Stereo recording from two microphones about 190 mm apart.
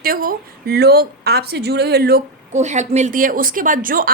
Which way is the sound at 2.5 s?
40° right (ahead or behind).